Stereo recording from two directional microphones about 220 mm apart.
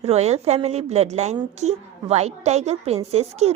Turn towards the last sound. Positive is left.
turn(degrees=-30)  # may be behind; listen again after turning